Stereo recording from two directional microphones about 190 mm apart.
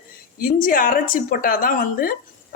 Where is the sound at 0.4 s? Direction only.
45° left (ahead or behind).